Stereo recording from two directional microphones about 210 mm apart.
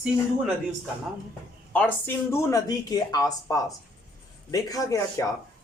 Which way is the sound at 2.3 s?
15° left (ahead or behind).